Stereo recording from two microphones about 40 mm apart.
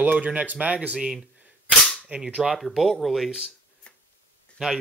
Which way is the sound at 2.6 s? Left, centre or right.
Centre.